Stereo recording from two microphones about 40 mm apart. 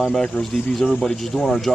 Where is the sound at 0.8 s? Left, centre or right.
Centre.